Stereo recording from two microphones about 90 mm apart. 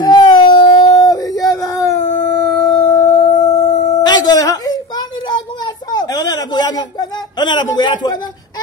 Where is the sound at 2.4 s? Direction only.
5° left (ahead or behind).